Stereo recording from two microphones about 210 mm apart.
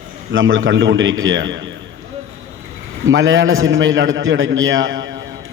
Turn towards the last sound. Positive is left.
turn(degrees=-65)  # may be behind; listen again after turning